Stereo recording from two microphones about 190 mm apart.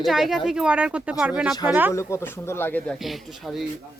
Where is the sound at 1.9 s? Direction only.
15° left (ahead or behind).